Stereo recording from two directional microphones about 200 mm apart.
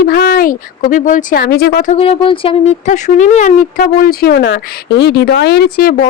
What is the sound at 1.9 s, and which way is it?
Speech, 30° left (ahead or behind).